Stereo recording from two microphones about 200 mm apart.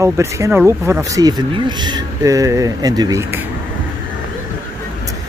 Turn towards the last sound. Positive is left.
turn(degrees=-15)  # may be behind; listen again after turning